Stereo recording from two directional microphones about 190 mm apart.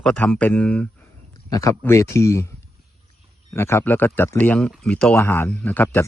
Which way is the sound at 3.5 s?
15° left (ahead or behind).